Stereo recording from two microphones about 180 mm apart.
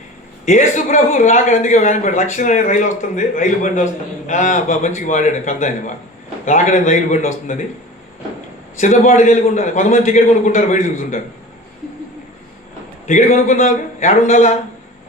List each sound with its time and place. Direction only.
0.4 s speech: 45° left (ahead or behind)
8.8 s speech: 40° left (ahead or behind)
13.1 s speech: 45° left (ahead or behind)